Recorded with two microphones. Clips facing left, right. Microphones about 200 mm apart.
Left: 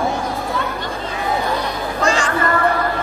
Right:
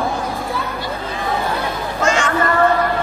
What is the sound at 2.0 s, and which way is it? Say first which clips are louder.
Children playing: right 1 dB; 35° left (ahead or behind).